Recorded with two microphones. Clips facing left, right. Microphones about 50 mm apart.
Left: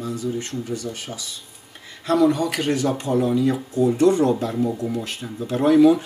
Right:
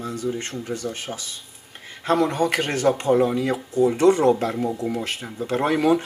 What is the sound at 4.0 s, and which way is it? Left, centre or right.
Speech, right.